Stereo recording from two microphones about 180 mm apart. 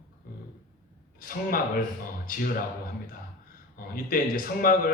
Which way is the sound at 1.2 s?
50° left (ahead or behind).